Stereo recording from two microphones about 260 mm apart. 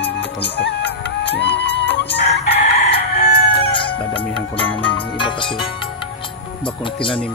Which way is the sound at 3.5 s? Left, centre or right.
Centre.